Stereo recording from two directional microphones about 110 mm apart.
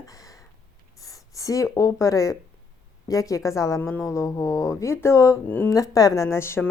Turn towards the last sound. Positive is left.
turn(degrees=25)  # may be behind; listen again after turning